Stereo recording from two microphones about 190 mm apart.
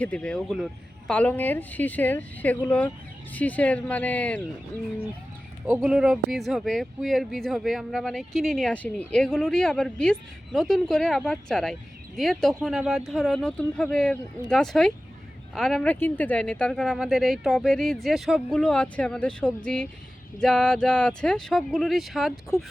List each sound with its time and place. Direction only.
0.0 s speech: 5° left (ahead or behind)
5.6 s speech: 5° right (ahead or behind)